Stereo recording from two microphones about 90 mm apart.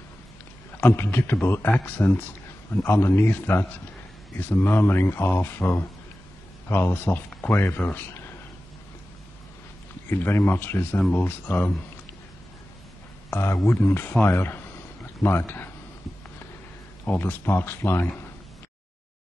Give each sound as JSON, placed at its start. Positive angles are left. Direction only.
{"t": 0.7, "sound": "a man's voice", "side_deg": 25}
{"t": 10.0, "sound": "a man's voice", "side_deg": 25}
{"t": 13.3, "sound": "a man's voice", "side_deg": 25}
{"t": 17.0, "sound": "a man's voice", "side_deg": 20}